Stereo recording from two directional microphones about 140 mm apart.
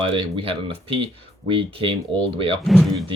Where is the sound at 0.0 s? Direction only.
40° right (ahead or behind).